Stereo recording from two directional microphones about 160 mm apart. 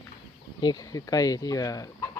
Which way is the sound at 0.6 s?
25° left (ahead or behind).